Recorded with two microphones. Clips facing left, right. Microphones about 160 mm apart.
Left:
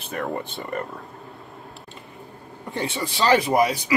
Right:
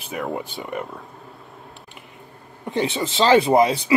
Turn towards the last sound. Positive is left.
turn(degrees=-25)  # may be behind; listen again after turning